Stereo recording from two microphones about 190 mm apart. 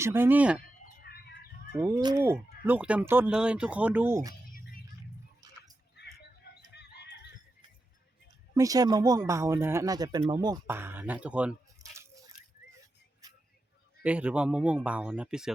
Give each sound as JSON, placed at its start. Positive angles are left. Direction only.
{"t": 0.0, "sound": "speech", "side_deg": -10}
{"t": 1.0, "sound": "bird", "side_deg": 55}
{"t": 1.7, "sound": "speech", "side_deg": -10}
{"t": 2.0, "sound": "speech", "side_deg": -20}
{"t": 2.6, "sound": "speech", "side_deg": -5}
{"t": 4.5, "sound": "music", "side_deg": 50}
{"t": 6.0, "sound": "bird", "side_deg": 60}
{"t": 6.7, "sound": "fowl", "side_deg": 60}
{"t": 8.5, "sound": "speech", "side_deg": -20}
{"t": 13.2, "sound": "vehicle", "side_deg": -20}
{"t": 14.0, "sound": "speech", "side_deg": -5}